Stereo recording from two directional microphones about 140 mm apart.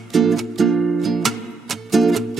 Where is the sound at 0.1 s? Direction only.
Centre (ahead or behind).